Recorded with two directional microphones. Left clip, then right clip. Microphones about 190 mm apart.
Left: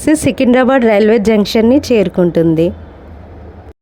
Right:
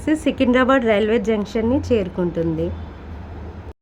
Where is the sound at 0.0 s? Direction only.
35° left (ahead or behind).